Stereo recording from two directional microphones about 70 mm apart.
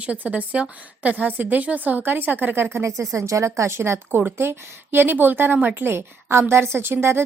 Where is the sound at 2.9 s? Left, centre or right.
Right.